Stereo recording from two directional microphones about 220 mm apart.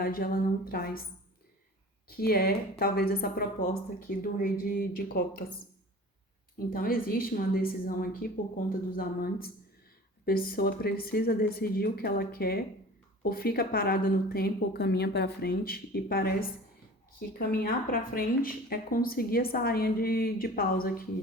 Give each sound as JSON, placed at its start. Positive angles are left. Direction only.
{"t": 0.0, "sound": "a woman's voice", "side_deg": 40}
{"t": 2.0, "sound": "speech", "side_deg": 45}
{"t": 6.7, "sound": "a woman's voice", "side_deg": 40}